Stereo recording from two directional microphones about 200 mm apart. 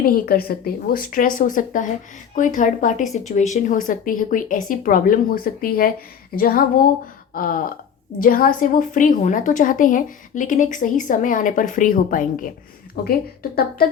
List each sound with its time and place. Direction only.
0.0 s a woman's voice: 45° left (ahead or behind)